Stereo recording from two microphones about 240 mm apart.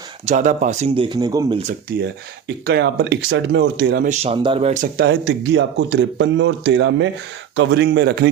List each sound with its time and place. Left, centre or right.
0.3 s speech: right
2.6 s speech: right
4.0 s speech: right
5.0 s speech: right